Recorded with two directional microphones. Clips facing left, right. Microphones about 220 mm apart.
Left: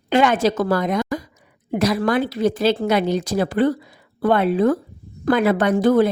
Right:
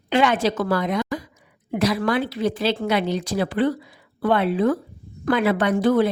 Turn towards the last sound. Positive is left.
turn(degrees=45)  # may be behind; listen again after turning